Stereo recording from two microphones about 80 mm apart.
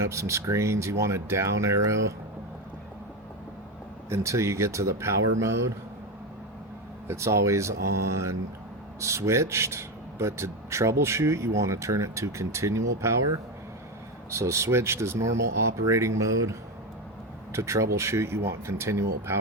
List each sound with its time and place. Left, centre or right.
0.0 s speech: right
4.1 s speech: right
7.1 s speech: right
9.0 s speech: right